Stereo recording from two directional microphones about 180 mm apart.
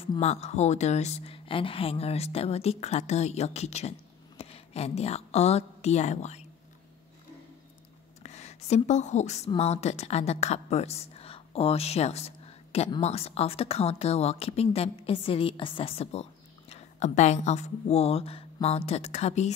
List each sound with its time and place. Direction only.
0.0 s a woman's voice: 35° left (ahead or behind)
8.2 s a woman's voice: 40° left (ahead or behind)